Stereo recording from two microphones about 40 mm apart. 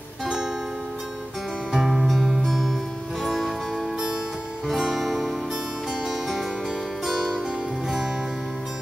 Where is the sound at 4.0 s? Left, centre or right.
Centre.